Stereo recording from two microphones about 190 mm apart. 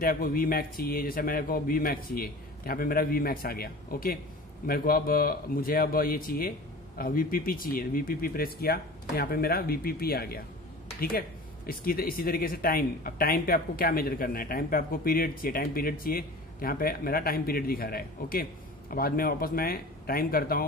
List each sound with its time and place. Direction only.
0.0 s speech: 50° left (ahead or behind)